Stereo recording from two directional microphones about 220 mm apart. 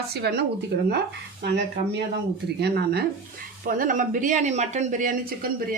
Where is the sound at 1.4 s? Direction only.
50° right (ahead or behind).